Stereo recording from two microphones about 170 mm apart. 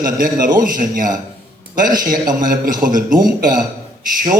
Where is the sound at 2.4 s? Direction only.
50° right (ahead or behind).